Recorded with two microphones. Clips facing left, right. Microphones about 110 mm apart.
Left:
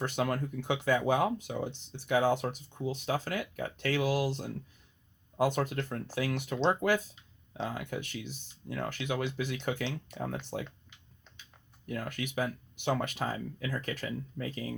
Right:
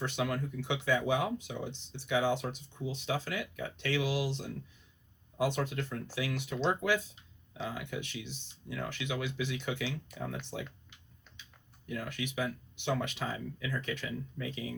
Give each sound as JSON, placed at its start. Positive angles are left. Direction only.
{"t": 0.0, "sound": "speech", "side_deg": 50}
{"t": 11.9, "sound": "speech", "side_deg": 50}